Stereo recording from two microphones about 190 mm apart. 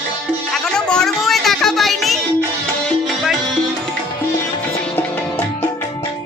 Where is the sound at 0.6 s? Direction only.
5° left (ahead or behind).